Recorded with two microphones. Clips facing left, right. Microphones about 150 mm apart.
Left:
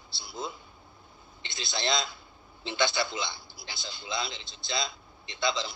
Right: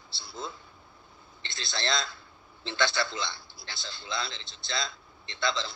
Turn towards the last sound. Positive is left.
turn(degrees=15)  # may be behind; listen again after turning